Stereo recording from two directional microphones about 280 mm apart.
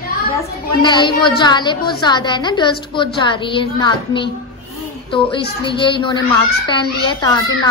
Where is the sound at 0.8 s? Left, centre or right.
Centre.